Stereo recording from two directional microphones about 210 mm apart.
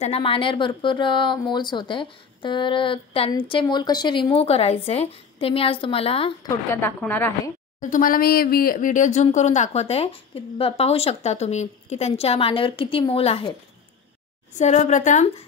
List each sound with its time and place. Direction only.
0.0 s speech: 25° left (ahead or behind)
6.7 s a woman's voice: 10° left (ahead or behind)
7.8 s speech: 40° left (ahead or behind)
14.6 s speech: 35° left (ahead or behind)